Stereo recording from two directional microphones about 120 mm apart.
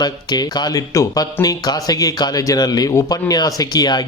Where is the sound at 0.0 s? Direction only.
35° left (ahead or behind).